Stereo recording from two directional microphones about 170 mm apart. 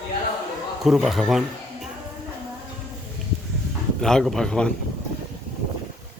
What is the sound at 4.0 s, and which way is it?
Speech, 5° left (ahead or behind).